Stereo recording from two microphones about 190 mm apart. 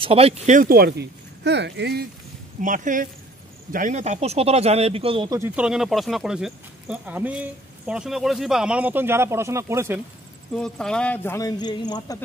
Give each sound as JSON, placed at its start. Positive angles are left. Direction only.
{"t": 0.0, "sound": "speech", "side_deg": -30}
{"t": 2.6, "sound": "speech", "side_deg": -45}
{"t": 5.4, "sound": "speech", "side_deg": -5}
{"t": 10.5, "sound": "speech", "side_deg": 5}